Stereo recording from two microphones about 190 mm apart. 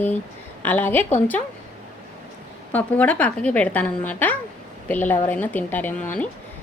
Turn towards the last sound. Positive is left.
turn(degrees=5)  # may be behind; listen again after turning